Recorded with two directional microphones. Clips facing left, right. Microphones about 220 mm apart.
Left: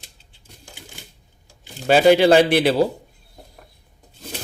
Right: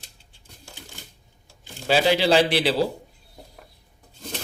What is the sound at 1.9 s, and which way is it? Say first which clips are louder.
Speech: left 6 dB; 50° left (ahead or behind).